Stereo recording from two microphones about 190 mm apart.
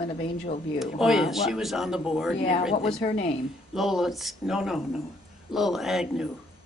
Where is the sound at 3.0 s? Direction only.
35° left (ahead or behind).